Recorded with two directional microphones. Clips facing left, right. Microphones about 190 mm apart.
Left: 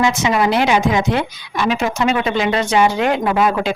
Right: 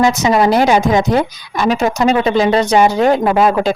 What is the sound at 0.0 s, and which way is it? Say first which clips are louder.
Speech: right 4 dB; 40° right (ahead or behind).